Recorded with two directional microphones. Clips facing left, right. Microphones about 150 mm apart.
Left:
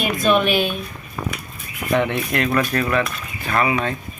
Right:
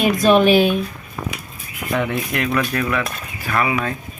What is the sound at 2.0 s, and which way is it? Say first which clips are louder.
Cutlery: even; 5° right (ahead or behind).